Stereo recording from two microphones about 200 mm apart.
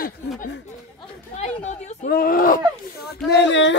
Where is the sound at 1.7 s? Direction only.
40° left (ahead or behind).